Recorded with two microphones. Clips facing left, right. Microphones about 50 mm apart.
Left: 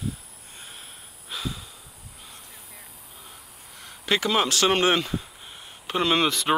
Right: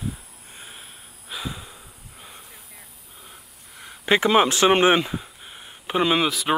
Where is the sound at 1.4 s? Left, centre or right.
Right.